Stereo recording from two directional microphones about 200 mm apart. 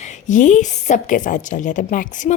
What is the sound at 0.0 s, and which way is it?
A woman's voice, 40° left (ahead or behind).